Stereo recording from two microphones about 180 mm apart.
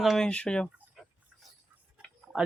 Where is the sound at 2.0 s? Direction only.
Centre (ahead or behind).